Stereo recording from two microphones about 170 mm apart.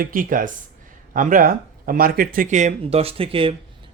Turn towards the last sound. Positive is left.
turn(degrees=-30)  # may be behind; listen again after turning